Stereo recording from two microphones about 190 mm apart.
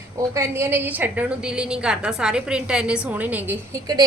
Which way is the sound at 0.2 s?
15° right (ahead or behind).